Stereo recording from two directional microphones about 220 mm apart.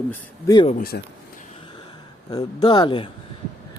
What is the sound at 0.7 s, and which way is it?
Speech, 45° left (ahead or behind).